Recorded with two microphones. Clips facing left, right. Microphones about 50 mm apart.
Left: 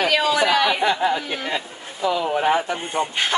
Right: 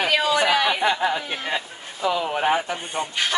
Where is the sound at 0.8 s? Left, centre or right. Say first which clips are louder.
Left 1 dB; centre.